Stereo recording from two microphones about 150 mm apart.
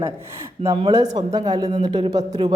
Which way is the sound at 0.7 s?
40° right (ahead or behind).